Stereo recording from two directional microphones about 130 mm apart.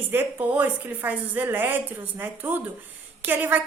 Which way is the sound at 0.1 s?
15° right (ahead or behind).